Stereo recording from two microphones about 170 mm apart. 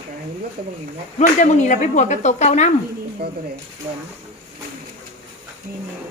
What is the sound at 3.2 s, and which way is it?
Speech, 70° right (ahead or behind).